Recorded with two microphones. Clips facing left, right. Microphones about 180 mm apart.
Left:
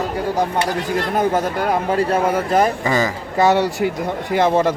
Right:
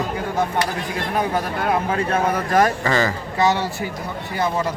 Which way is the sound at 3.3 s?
55° left (ahead or behind).